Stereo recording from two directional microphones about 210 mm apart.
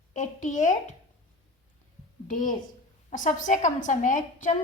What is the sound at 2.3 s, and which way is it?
A woman's voice, 40° left (ahead or behind).